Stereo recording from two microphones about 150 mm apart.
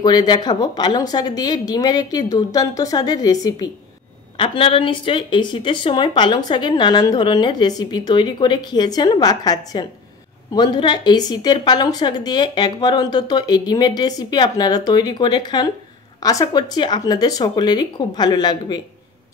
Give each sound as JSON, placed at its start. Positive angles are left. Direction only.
{"t": 0.0, "sound": "a woman's voice", "side_deg": 25}
{"t": 4.4, "sound": "a woman's voice", "side_deg": 35}